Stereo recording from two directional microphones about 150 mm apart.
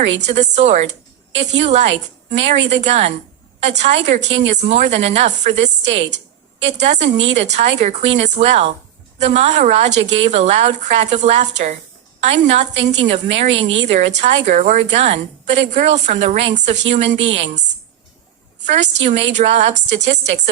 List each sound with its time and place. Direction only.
0.0 s a woman's voice: 45° right (ahead or behind)
18.6 s a woman's voice: 50° right (ahead or behind)